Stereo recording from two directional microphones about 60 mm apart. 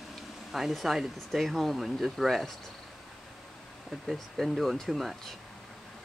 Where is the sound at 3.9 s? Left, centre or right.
Centre.